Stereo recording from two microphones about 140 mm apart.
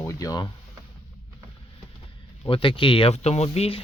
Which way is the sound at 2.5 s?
40° left (ahead or behind).